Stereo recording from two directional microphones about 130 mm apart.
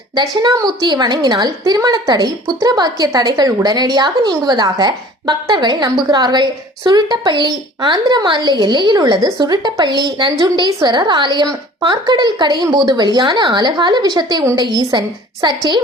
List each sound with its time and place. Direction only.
0.1 s a woman's voice: 30° right (ahead or behind)